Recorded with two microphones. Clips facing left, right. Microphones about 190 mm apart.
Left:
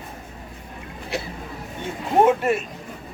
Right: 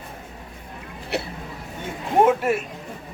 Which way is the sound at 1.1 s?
65° right (ahead or behind).